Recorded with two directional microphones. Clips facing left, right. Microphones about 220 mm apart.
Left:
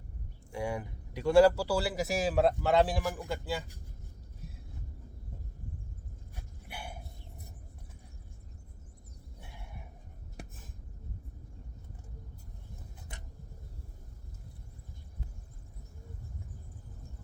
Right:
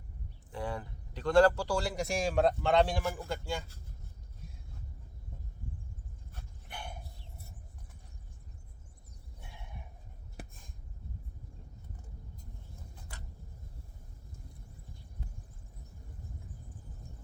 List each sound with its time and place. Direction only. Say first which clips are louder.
0.5 s speech: left 3 dB; 10° left (ahead or behind)
6.3 s dog: left 1 dB; 10° left (ahead or behind)
10.3 s a sound: left 1 dB; 5° left (ahead or behind)
13.1 s vehicle: left 1 dB; 20° left (ahead or behind)